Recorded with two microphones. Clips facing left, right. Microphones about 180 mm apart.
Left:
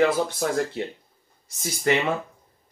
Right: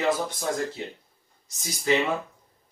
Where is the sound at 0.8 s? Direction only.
65° left (ahead or behind).